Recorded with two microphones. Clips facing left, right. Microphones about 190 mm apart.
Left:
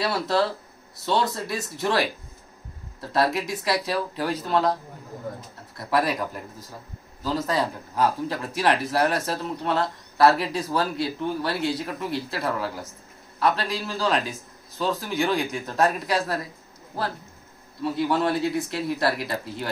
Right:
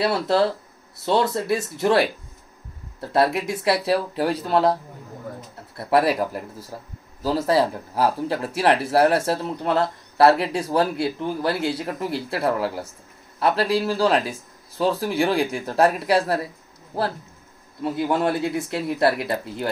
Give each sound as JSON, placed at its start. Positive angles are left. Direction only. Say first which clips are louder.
{"t": 1.0, "sound": "speech", "louder": "right 4 dB", "side_deg": -25}
{"t": 3.1, "sound": "speech", "louder": "right 3 dB", "side_deg": -25}
{"t": 5.8, "sound": "speech", "louder": "right 5 dB", "side_deg": -30}
{"t": 7.2, "sound": "speech", "louder": "right 5 dB", "side_deg": -35}
{"t": 18.0, "sound": "speech", "louder": "right 1 dB", "side_deg": -25}